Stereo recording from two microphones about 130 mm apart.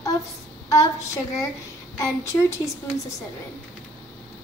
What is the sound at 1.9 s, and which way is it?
Speech, 25° left (ahead or behind).